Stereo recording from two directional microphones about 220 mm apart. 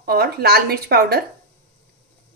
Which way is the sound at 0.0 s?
45° right (ahead or behind).